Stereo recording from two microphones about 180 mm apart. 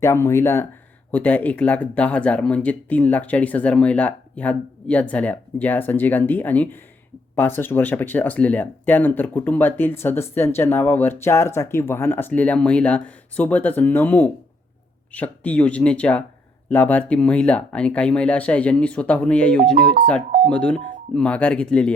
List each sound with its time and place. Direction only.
0.0 s speech: 15° left (ahead or behind)
19.7 s speech: 60° right (ahead or behind)
20.5 s speech: 5° left (ahead or behind)